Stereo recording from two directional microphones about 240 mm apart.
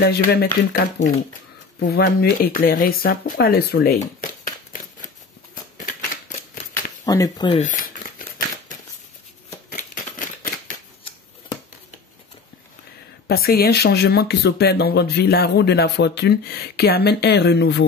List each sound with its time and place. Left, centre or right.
0.0 s speech: left
5.5 s scissors: left
6.7 s a sound: centre
7.6 s speech: left
9.8 s a sound: left
13.3 s speech: left